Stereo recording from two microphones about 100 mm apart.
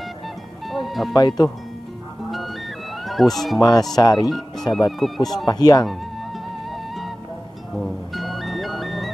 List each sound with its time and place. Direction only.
0.7 s music: centre (ahead or behind)
1.1 s speech: 40° left (ahead or behind)
3.1 s speech: centre (ahead or behind)
3.9 s speech: 40° left (ahead or behind)
4.3 s speech: centre (ahead or behind)
5.5 s speech: 40° left (ahead or behind)
7.7 s music: centre (ahead or behind)